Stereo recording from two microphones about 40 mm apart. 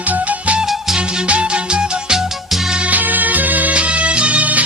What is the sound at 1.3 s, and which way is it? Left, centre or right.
Music, right.